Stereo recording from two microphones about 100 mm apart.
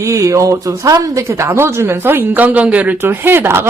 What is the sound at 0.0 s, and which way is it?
Speech, 30° right (ahead or behind).